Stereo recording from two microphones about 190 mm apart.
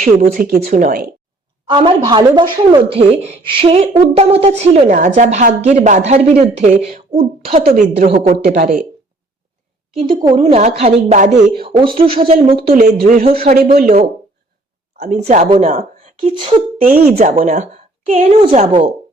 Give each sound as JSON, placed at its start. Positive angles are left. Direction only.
{"t": 0.0, "sound": "speech", "side_deg": -45}
{"t": 0.6, "sound": "speech", "side_deg": -40}
{"t": 1.7, "sound": "speech", "side_deg": -25}
{"t": 7.6, "sound": "speech", "side_deg": -55}
{"t": 10.2, "sound": "a woman's voice", "side_deg": -25}
{"t": 12.6, "sound": "speech", "side_deg": -50}
{"t": 13.2, "sound": "speech", "side_deg": -30}
{"t": 13.5, "sound": "speech", "side_deg": -50}
{"t": 16.8, "sound": "speech", "side_deg": -40}